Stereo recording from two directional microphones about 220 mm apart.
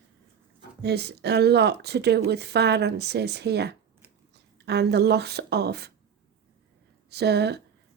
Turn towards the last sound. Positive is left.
turn(degrees=-50)  # may be behind; listen again after turning